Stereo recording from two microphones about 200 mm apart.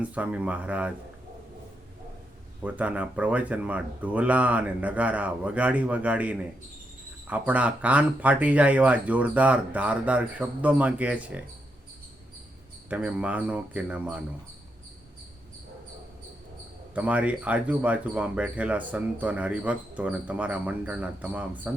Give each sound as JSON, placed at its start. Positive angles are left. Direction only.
{"t": 0.0, "sound": "speech", "side_deg": -5}
{"t": 2.6, "sound": "speech", "side_deg": -5}
{"t": 12.9, "sound": "speech", "side_deg": -5}
{"t": 16.9, "sound": "speech", "side_deg": -5}